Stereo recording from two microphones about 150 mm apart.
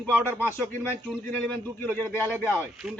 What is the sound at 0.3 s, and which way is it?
Speech, 15° right (ahead or behind).